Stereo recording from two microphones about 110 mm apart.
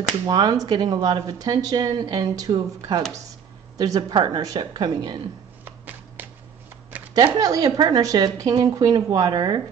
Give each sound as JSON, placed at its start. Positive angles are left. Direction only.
{"t": 0.3, "sound": "speech", "side_deg": -35}
{"t": 5.7, "sound": "a sound", "side_deg": -15}
{"t": 7.3, "sound": "speech", "side_deg": -35}